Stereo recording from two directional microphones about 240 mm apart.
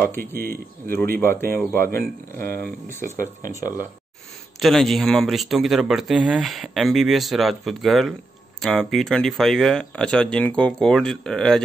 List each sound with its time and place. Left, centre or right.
0.4 s speech: right
1.2 s speech: centre
1.9 s speech: right
4.6 s speech: centre